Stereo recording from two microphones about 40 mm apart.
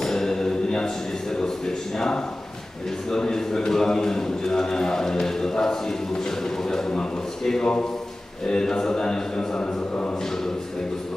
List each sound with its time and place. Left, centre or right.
0.0 s mantra: centre
3.1 s a man's voice: centre
6.7 s a sound: centre
8.5 s speech: centre